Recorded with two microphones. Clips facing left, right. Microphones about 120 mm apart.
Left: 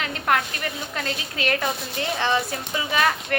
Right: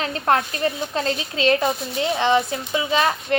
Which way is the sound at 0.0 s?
30° right (ahead or behind).